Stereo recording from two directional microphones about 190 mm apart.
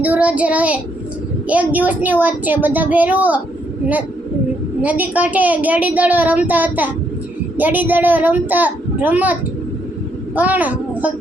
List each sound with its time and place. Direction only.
0.0 s a woman's voice: 5° right (ahead or behind)
4.8 s a woman's voice: 10° right (ahead or behind)